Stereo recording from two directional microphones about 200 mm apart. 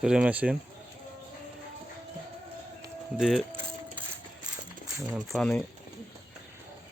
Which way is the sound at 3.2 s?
Centre (ahead or behind).